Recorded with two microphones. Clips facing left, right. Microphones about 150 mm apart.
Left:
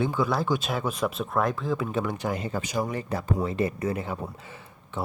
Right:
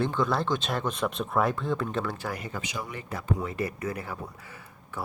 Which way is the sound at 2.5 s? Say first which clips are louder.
Left 7 dB; 40° left (ahead or behind).